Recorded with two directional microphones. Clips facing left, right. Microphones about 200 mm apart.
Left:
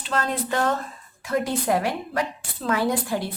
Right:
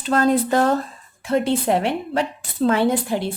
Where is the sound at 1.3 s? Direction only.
25° right (ahead or behind).